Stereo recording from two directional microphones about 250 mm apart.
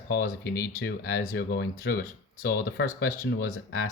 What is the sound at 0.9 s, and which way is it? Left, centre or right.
Speech, left.